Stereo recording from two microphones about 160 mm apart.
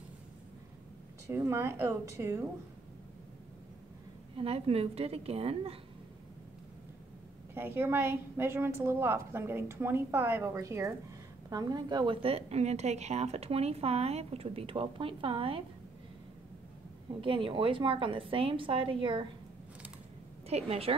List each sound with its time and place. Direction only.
1.3 s a woman's voice: 15° right (ahead or behind)
4.4 s a woman's voice: 40° right (ahead or behind)
7.5 s a woman's voice: 15° right (ahead or behind); by 15.6 s 35° right (ahead or behind)
17.2 s a woman's voice: 35° right (ahead or behind)
20.4 s a woman's voice: 40° right (ahead or behind)